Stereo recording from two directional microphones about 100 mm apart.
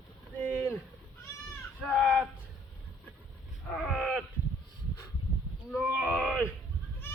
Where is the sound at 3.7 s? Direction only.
Centre (ahead or behind).